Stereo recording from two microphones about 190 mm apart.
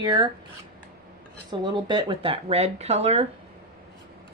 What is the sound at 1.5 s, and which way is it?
Speech, 25° right (ahead or behind).